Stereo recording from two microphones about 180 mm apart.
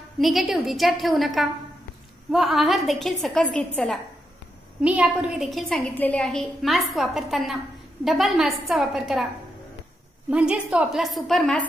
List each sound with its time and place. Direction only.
0.2 s a woman's voice: centre (ahead or behind)
4.8 s a woman's voice: 5° right (ahead or behind)
10.3 s a woman's voice: 5° right (ahead or behind)